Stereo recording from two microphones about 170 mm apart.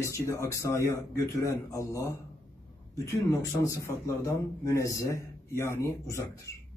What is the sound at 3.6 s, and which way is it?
Speech, 20° left (ahead or behind).